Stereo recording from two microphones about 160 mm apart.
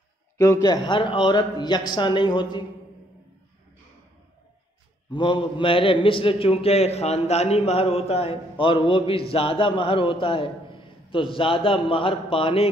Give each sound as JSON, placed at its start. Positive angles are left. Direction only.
{"t": 0.4, "sound": "a man's voice", "side_deg": 20}
{"t": 5.1, "sound": "a man's voice", "side_deg": 30}